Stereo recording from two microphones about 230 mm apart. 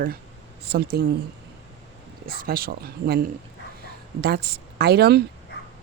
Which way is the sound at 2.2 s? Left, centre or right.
Right.